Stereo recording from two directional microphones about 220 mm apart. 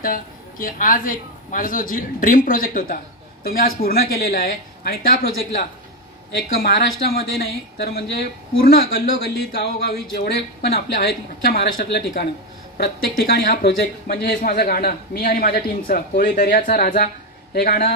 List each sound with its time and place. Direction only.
0.0 s a man's voice: 40° left (ahead or behind)
7.1 s speech: 45° left (ahead or behind)
8.5 s speech: 40° left (ahead or behind)